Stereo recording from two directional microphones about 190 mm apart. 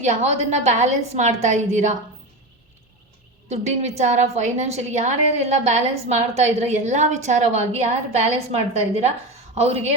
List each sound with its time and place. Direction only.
0.0 s a woman's voice: 35° right (ahead or behind)
3.5 s a woman's voice: 35° right (ahead or behind)